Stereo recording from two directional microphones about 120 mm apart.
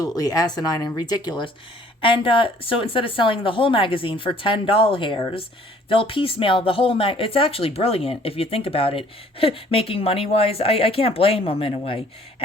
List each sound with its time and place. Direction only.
0.0 s speech: 30° left (ahead or behind)
2.0 s speech: 45° left (ahead or behind)